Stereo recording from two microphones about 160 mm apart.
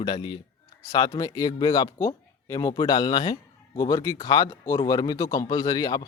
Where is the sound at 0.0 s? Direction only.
30° left (ahead or behind).